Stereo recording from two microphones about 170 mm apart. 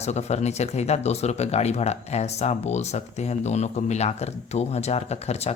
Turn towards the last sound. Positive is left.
turn(degrees=40)  # may be behind; listen again after turning